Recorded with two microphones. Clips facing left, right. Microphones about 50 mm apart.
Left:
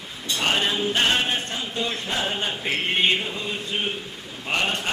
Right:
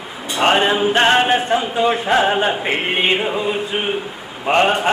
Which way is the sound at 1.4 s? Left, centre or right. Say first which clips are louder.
Right 11 dB; centre.